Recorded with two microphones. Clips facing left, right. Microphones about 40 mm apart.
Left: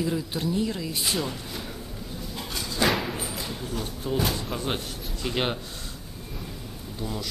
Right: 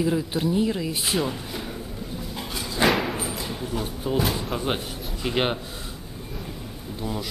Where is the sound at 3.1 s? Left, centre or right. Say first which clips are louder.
Right 3 dB; centre.